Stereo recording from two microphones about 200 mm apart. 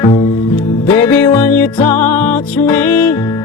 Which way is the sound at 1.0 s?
10° left (ahead or behind).